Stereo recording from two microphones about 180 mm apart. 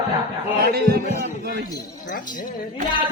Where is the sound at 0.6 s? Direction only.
55° right (ahead or behind).